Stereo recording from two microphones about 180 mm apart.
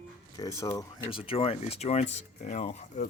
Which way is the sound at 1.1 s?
30° left (ahead or behind).